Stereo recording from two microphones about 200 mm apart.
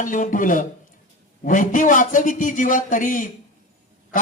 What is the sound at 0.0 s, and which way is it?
A man's voice, 40° left (ahead or behind).